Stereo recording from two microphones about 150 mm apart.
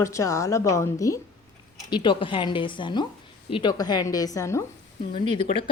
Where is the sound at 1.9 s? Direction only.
35° left (ahead or behind).